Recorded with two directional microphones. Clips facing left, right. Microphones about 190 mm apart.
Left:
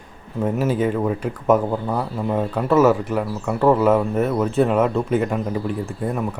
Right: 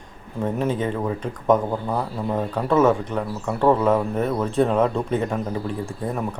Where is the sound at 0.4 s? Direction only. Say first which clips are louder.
Left 3 dB; 5° left (ahead or behind).